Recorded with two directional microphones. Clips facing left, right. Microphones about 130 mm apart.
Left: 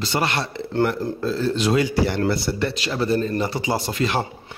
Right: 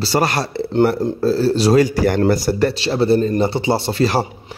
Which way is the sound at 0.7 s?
25° right (ahead or behind).